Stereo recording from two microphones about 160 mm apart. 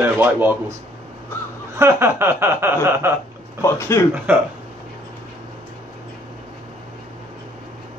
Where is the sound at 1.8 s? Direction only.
15° right (ahead or behind).